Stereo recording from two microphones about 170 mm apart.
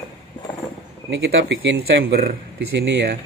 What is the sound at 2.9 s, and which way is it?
Speech, 85° right.